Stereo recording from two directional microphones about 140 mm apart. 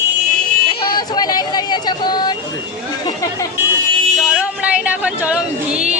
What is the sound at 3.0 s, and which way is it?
Speech, 25° left (ahead or behind).